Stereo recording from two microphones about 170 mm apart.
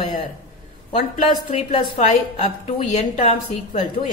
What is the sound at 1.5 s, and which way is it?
A woman's voice, 35° left (ahead or behind).